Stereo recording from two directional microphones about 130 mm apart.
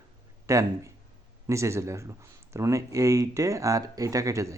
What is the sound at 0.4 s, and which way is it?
Speech, 25° right (ahead or behind).